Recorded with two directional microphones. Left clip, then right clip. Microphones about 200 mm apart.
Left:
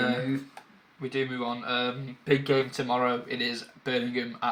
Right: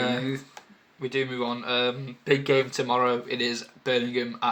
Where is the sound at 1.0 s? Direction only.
35° right (ahead or behind).